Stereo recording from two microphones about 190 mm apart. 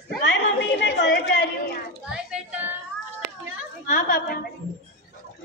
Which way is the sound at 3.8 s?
45° left (ahead or behind).